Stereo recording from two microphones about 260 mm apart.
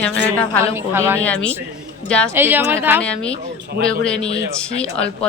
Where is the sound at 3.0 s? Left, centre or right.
Centre.